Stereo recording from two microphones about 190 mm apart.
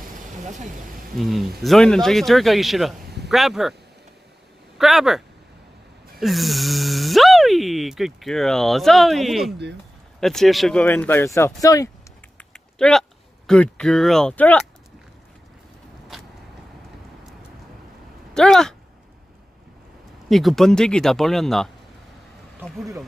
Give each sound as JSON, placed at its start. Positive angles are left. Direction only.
{"t": 0.0, "sound": "vehicle", "side_deg": -40}
{"t": 1.1, "sound": "speech", "side_deg": 0}
{"t": 4.7, "sound": "speech", "side_deg": 0}
{"t": 12.4, "sound": "typing", "side_deg": 5}
{"t": 13.5, "sound": "speech", "side_deg": 5}
{"t": 18.3, "sound": "speech", "side_deg": 5}
{"t": 20.2, "sound": "speech", "side_deg": 0}